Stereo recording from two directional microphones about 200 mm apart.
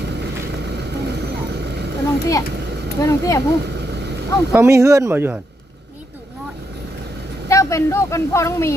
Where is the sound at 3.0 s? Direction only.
15° left (ahead or behind).